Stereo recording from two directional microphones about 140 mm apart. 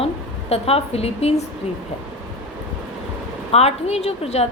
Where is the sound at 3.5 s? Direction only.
50° left (ahead or behind).